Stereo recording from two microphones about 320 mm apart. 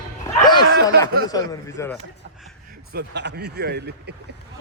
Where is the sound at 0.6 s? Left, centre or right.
Right.